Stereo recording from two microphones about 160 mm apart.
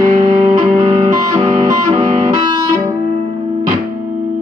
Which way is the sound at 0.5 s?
25° right (ahead or behind).